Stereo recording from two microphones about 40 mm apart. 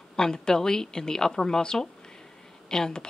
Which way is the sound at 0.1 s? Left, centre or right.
Centre.